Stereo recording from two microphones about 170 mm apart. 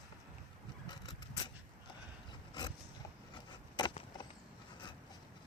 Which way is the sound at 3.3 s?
25° left (ahead or behind).